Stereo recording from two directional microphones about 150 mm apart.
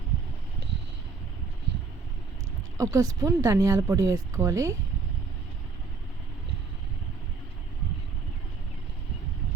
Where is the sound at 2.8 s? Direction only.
20° right (ahead or behind).